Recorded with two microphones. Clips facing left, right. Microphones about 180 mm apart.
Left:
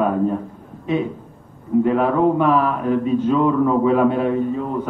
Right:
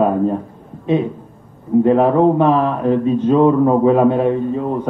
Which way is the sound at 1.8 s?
25° right (ahead or behind).